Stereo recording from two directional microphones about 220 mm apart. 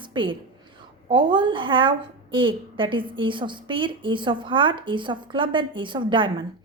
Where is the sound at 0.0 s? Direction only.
20° right (ahead or behind).